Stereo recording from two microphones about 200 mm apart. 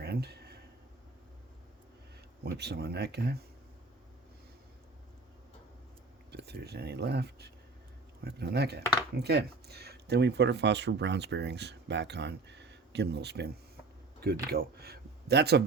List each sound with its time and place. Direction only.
0.0 s a sound: 55° right (ahead or behind)
2.4 s speech: 55° right (ahead or behind)
6.3 s speech: 55° right (ahead or behind)
14.5 s a man's voice: 50° right (ahead or behind)